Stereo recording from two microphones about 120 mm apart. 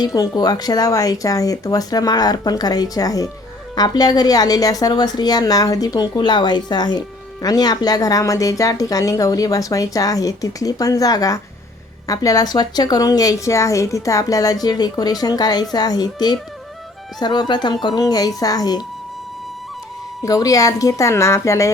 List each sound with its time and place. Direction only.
0.0 s speech: 30° left (ahead or behind)
20.2 s speech: 30° left (ahead or behind)